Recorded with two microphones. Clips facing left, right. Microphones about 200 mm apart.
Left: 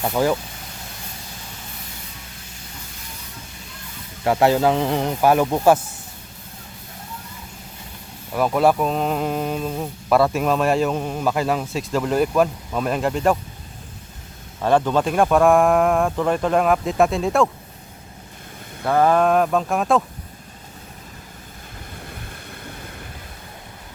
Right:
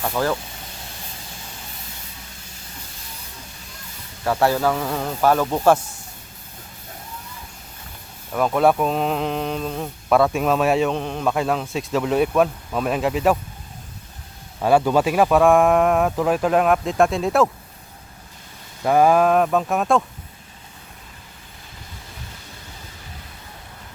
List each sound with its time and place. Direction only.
0.0 s speech: 15° left (ahead or behind)
4.2 s speech: 15° left (ahead or behind)
8.3 s speech: 5° left (ahead or behind)
14.6 s speech: 10° right (ahead or behind)
18.9 s speech: 10° right (ahead or behind)